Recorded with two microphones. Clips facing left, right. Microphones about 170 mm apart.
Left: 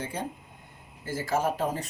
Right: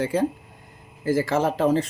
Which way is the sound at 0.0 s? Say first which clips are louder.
Right 12 dB; 90° right.